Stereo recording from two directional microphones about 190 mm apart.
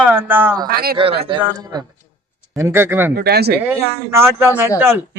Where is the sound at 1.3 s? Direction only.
20° right (ahead or behind).